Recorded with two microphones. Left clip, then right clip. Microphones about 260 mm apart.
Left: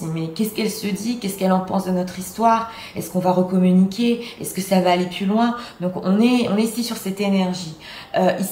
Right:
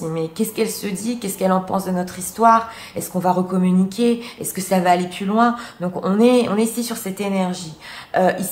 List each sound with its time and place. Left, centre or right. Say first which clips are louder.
0.1 s a woman's voice: left 1 dB; centre